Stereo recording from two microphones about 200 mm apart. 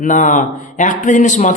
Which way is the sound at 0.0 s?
40° left (ahead or behind).